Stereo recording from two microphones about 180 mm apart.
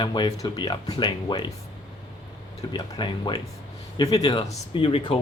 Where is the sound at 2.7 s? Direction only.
25° left (ahead or behind).